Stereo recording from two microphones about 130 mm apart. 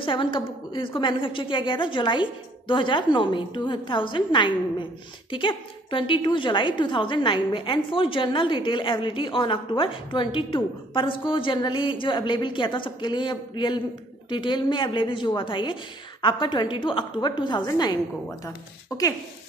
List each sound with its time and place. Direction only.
0.0 s a woman's voice: 40° left (ahead or behind)